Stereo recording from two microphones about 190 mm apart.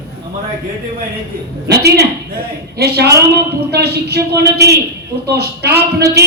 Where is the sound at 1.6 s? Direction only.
60° right (ahead or behind).